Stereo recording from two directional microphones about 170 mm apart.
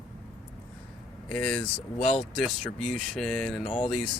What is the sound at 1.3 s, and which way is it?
Speech, 5° left (ahead or behind).